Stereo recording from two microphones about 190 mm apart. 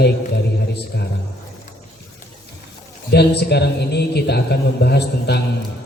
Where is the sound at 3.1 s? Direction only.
60° left (ahead or behind).